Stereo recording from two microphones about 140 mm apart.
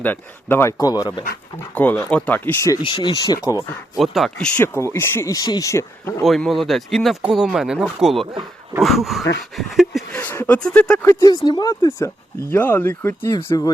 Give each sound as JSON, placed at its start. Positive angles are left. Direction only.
{"t": 0.0, "sound": "speech", "side_deg": 15}
{"t": 1.7, "sound": "speech", "side_deg": 10}
{"t": 2.8, "sound": "speech", "side_deg": 35}
{"t": 3.9, "sound": "speech", "side_deg": 0}
{"t": 4.6, "sound": "speech", "side_deg": 15}
{"t": 6.2, "sound": "speech", "side_deg": 0}
{"t": 10.1, "sound": "speech", "side_deg": 15}
{"t": 11.4, "sound": "speech", "side_deg": 25}
{"t": 13.3, "sound": "speech", "side_deg": 30}